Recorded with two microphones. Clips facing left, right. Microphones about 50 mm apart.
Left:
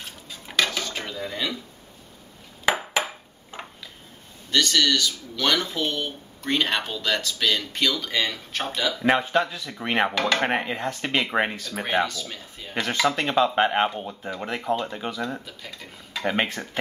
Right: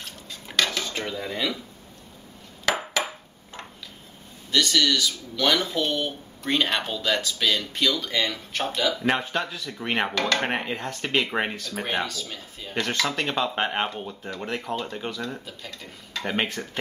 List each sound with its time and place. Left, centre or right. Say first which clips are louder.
0.0 s dishes: even; centre
1.0 s speech: right 1 dB; centre
2.6 s a sound: left 2 dB; left
4.5 s speech: left 1 dB; centre